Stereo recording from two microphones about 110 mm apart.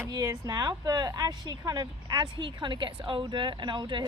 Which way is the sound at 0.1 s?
35° right (ahead or behind).